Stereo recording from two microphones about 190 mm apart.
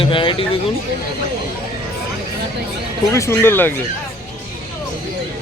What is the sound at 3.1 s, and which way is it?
Speech, 15° left (ahead or behind).